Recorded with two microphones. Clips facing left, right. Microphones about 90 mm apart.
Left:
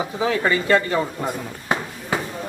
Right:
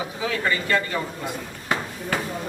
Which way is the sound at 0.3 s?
30° left (ahead or behind).